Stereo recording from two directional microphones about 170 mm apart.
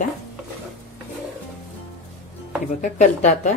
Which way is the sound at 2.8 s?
45° left (ahead or behind).